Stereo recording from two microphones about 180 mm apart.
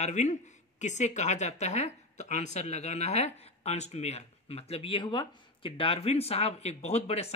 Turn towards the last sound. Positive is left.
turn(degrees=35)  # may be behind; listen again after turning